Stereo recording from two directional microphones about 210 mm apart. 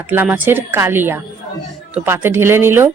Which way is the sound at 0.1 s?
10° right (ahead or behind).